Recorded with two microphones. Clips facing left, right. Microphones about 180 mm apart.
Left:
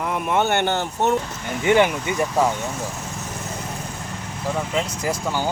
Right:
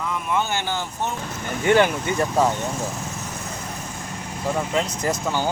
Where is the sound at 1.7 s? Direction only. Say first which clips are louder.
Even; 15° left (ahead or behind).